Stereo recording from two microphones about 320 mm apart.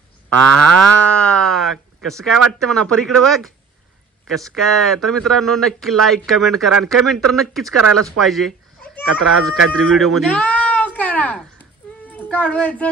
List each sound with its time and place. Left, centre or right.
1.0 s a sound: centre
2.6 s speech: centre
7.7 s speech: right
8.2 s speech: centre
9.8 s a sound: centre
12.1 s speech: centre